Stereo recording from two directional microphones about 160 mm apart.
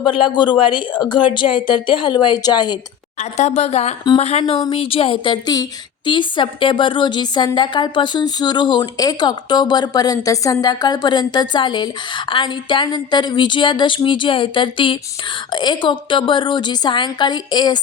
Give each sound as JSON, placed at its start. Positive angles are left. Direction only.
{"t": 0.0, "sound": "a woman's voice", "side_deg": 30}
{"t": 3.2, "sound": "a woman's voice", "side_deg": 45}